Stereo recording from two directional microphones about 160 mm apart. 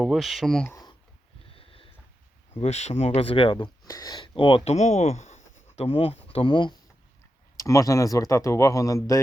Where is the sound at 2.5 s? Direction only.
40° left (ahead or behind).